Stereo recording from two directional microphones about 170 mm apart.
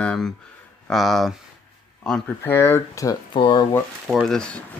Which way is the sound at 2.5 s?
15° left (ahead or behind).